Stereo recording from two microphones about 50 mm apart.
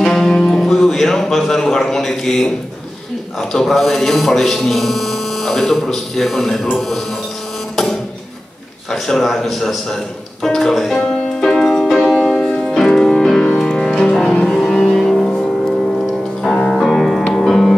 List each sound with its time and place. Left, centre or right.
0.0 s music: centre
3.3 s speech: centre
8.9 s speech: centre
11.1 s music: centre
12.4 s music: left
12.7 s music: centre
14.4 s vehicle: centre
16.4 s music: centre